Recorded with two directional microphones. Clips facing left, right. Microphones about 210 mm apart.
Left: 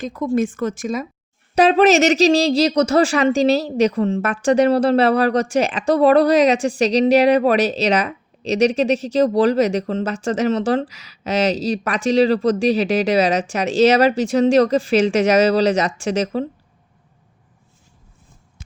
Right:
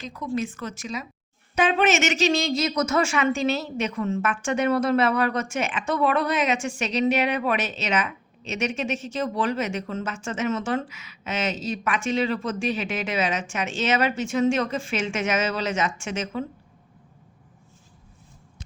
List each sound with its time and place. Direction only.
0.0 s a woman's voice: 50° left (ahead or behind)
1.5 s speech: 35° left (ahead or behind)